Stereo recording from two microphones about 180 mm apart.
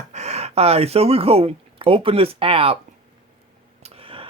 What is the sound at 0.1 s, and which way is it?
Speech, 40° right (ahead or behind).